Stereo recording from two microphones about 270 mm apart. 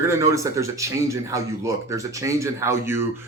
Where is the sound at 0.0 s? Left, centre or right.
Centre.